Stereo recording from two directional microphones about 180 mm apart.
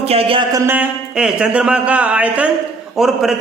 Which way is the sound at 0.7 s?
5° right (ahead or behind).